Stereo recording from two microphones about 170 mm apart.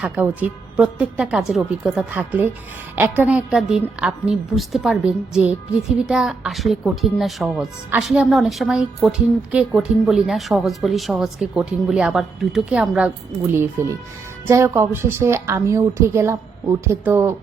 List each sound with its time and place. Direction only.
0.0 s a woman's voice: 10° right (ahead or behind)
13.8 s a woman's voice: 15° right (ahead or behind)